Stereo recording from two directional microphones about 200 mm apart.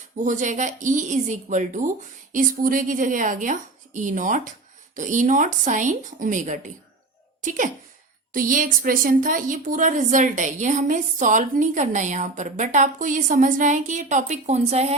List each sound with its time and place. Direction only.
0.2 s a woman's voice: 40° right (ahead or behind)